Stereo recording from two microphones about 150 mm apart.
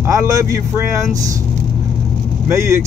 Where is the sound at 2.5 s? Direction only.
20° right (ahead or behind).